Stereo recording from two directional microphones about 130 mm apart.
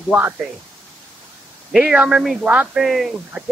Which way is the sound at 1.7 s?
5° right (ahead or behind).